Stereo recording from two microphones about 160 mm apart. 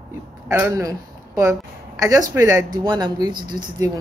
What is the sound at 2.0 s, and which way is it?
Speech, 20° right (ahead or behind).